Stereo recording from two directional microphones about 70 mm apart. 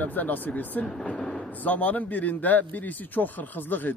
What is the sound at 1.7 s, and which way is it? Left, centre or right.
A man's voice, left.